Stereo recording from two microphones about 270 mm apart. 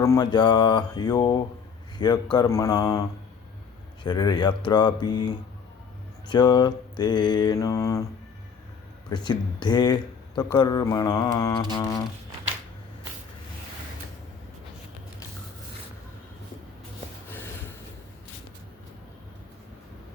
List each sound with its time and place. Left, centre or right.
0.0 s speech: centre
4.0 s speech: centre
6.2 s speech: centre
9.0 s speech: centre
17.2 s a sound: centre